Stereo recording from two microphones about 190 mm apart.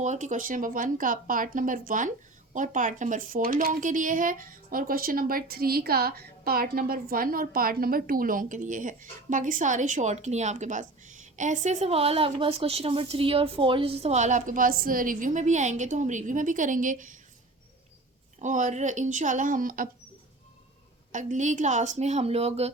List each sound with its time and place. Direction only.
0.0 s a woman's voice: 40° right (ahead or behind)
18.3 s speech: 40° right (ahead or behind)
21.1 s speech: 40° right (ahead or behind)